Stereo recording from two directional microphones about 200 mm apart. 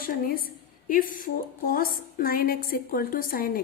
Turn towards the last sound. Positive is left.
turn(degrees=45)  # may be behind; listen again after turning